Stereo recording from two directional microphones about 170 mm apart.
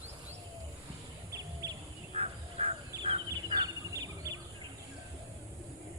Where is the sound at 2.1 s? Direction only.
40° right (ahead or behind).